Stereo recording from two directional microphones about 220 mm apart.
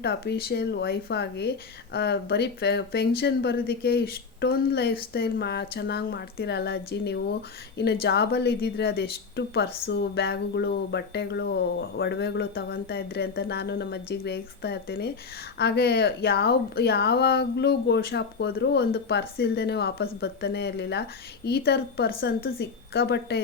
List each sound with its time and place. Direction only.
0.0 s speech: 50° left (ahead or behind)